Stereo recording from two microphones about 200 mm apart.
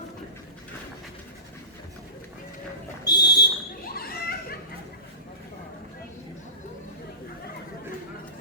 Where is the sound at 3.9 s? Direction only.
50° left (ahead or behind).